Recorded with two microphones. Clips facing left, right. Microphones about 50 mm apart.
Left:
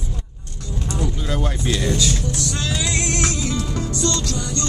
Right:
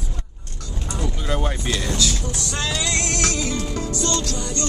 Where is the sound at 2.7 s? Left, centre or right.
Centre.